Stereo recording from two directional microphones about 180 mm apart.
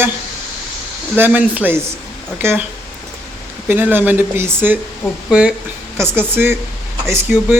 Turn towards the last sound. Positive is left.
turn(degrees=-10)  # may be behind; listen again after turning